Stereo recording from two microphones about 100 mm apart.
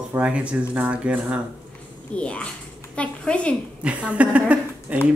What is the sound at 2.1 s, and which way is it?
A woman's voice, 10° left (ahead or behind).